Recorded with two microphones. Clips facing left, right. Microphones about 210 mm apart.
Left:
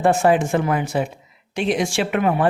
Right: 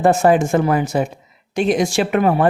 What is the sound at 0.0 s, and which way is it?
Speech, 40° right (ahead or behind).